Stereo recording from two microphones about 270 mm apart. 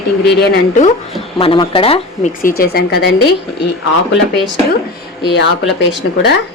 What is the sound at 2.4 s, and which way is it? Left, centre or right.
Speech, left.